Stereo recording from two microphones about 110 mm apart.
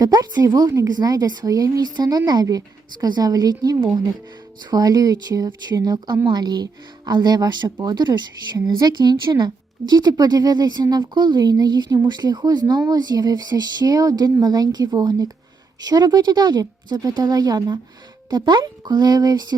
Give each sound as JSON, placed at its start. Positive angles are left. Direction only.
{"t": 0.0, "sound": "a woman's voice", "side_deg": -35}